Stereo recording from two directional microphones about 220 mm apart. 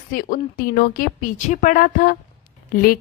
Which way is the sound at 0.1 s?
40° left (ahead or behind).